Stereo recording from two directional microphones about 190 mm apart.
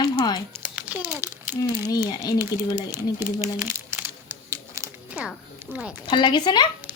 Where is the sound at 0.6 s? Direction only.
5° right (ahead or behind).